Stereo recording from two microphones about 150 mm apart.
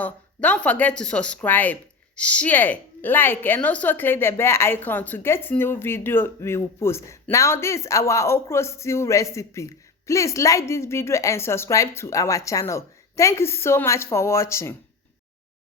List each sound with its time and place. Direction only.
0.0 s speech: 10° left (ahead or behind)